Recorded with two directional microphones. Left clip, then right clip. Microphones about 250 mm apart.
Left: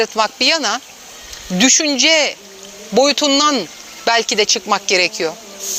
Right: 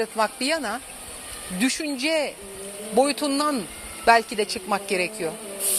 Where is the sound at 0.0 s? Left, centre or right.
Left.